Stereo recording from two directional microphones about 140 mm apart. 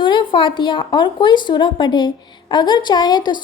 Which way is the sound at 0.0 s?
35° left (ahead or behind).